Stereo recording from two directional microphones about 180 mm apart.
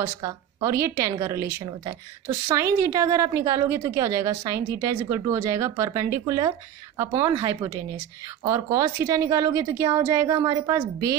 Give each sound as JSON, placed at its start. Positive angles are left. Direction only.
{"t": 0.0, "sound": "a woman's voice", "side_deg": -20}